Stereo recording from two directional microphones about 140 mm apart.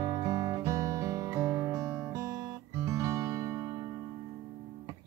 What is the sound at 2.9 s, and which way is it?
Music, 20° right (ahead or behind).